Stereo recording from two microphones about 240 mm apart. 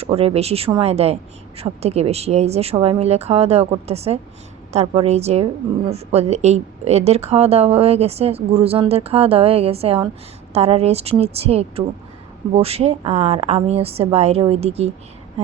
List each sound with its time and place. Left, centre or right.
0.0 s a woman's voice: right